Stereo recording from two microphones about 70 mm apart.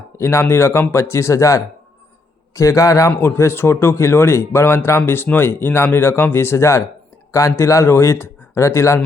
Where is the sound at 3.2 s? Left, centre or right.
Left.